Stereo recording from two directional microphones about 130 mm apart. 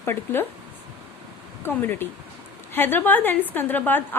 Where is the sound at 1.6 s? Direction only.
15° left (ahead or behind).